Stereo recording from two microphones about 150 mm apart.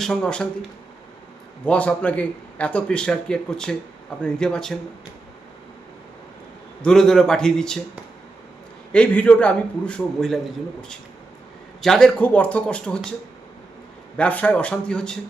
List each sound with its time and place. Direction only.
0.0 s speech: 5° left (ahead or behind)
1.6 s a man's voice: 10° left (ahead or behind)
6.8 s speech: 5° left (ahead or behind)
8.9 s a man's voice: 10° left (ahead or behind)
14.2 s a man's voice: 10° left (ahead or behind)